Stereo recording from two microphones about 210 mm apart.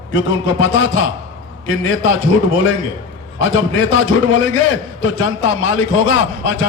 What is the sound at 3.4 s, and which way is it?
A man's voice, 65° left (ahead or behind).